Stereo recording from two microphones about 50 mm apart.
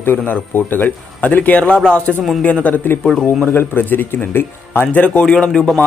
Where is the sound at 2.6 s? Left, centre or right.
Left.